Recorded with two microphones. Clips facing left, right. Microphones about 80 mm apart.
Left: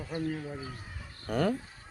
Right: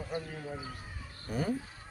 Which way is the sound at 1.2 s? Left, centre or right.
Left.